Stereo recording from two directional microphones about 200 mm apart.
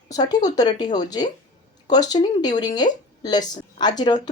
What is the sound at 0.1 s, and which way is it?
Speech, 20° left (ahead or behind).